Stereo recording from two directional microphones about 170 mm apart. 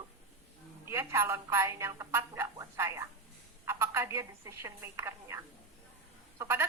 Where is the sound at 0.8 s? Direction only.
15° right (ahead or behind).